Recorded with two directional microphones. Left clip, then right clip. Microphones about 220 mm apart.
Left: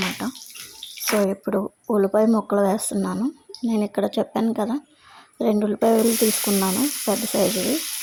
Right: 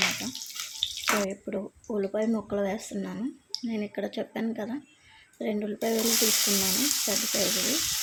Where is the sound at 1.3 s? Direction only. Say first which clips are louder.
Left 10 dB; 30° left (ahead or behind).